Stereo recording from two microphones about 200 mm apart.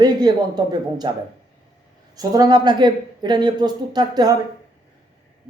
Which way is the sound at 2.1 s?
20° right (ahead or behind).